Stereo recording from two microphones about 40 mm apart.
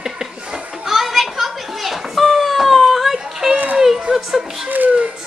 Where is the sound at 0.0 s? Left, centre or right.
Centre.